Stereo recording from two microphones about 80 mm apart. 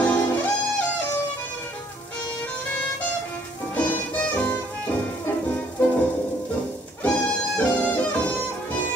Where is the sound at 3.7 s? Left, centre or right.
Centre.